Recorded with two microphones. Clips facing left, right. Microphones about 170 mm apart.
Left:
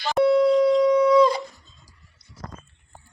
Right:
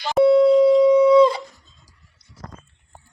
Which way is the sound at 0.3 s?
25° right (ahead or behind).